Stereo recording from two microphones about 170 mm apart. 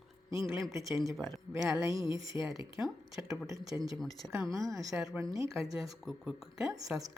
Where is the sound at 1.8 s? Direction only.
20° right (ahead or behind).